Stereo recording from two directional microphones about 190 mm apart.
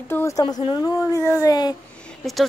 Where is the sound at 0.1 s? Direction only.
15° left (ahead or behind).